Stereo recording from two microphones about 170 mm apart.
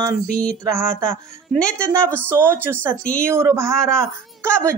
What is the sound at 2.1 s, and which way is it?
Speech, 15° right (ahead or behind).